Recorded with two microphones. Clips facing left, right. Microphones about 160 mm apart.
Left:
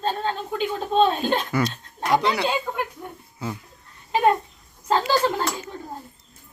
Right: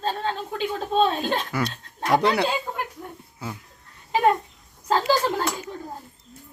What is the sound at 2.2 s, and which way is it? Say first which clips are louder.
Speech: right 2 dB; 55° right (ahead or behind).